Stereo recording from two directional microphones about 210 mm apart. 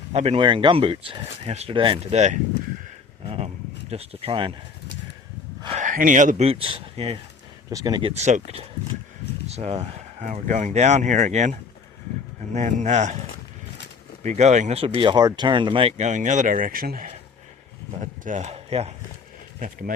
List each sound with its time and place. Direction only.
0.1 s speech: 30° right (ahead or behind)
5.6 s speech: 35° right (ahead or behind)
7.7 s speech: 15° right (ahead or behind)
8.1 s speech: 30° right (ahead or behind)
12.5 s speech: 35° right (ahead or behind)
14.3 s speech: 35° right (ahead or behind)
19.6 s speech: 40° right (ahead or behind)